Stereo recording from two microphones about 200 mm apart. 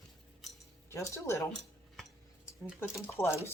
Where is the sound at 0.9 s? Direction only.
15° left (ahead or behind).